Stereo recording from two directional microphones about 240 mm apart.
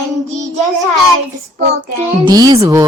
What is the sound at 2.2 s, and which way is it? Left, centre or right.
Speech, centre.